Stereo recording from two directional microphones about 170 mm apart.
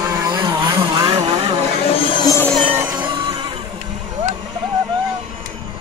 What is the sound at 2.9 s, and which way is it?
Music, 25° right (ahead or behind).